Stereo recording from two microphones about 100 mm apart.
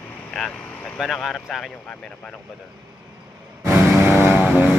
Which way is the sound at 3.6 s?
25° right (ahead or behind).